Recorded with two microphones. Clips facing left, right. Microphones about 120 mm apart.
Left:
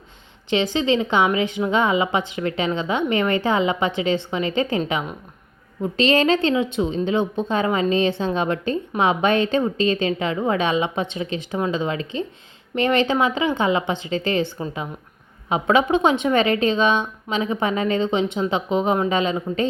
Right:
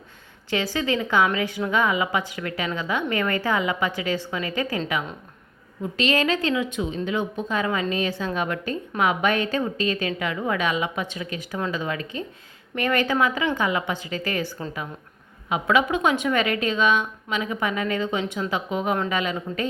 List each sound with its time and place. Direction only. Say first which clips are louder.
0.5 s a woman's voice: left 5 dB; 20° left (ahead or behind)
5.8 s a woman's voice: left 5 dB; 30° left (ahead or behind)